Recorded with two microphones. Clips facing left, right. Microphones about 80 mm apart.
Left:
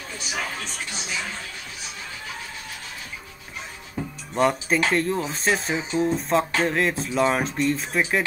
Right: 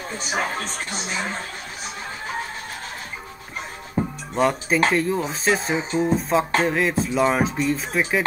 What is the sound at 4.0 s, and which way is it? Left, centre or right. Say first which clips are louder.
Music: right 7 dB; right.